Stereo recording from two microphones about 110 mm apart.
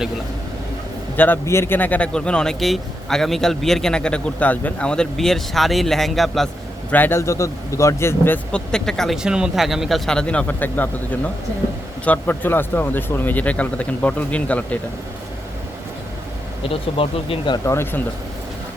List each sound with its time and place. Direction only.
1.1 s a man's voice: 15° left (ahead or behind); by 6.5 s centre (ahead or behind)
6.9 s speech: 20° left (ahead or behind)
8.5 s a man's voice: 5° left (ahead or behind)
10.1 s speech: 10° left (ahead or behind)
16.6 s speech: 55° left (ahead or behind)
17.7 s speech: 20° left (ahead or behind)